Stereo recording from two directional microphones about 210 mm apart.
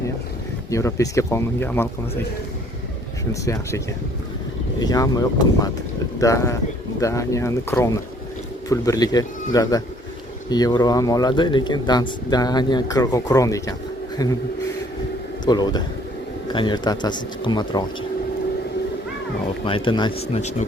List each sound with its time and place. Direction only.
0.7 s speech: 15° left (ahead or behind)
3.4 s speech: 15° left (ahead or behind)
4.8 s a man's voice: 15° left (ahead or behind)
15.4 s a man's voice: 20° left (ahead or behind)
19.6 s a man's voice: 25° left (ahead or behind)